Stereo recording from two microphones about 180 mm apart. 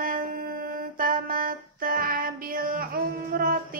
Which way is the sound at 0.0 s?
50° right (ahead or behind).